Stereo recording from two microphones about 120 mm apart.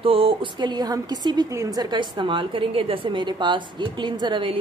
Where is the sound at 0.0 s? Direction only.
50° right (ahead or behind).